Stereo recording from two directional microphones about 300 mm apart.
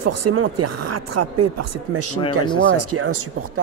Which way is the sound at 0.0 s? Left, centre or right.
Right.